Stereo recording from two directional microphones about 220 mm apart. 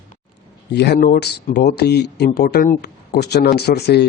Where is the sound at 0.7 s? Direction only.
50° left (ahead or behind).